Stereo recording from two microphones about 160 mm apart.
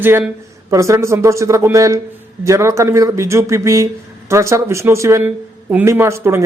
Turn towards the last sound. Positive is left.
turn(degrees=-15)  # may be behind; listen again after turning